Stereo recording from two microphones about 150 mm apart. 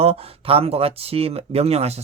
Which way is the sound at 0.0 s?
40° right (ahead or behind).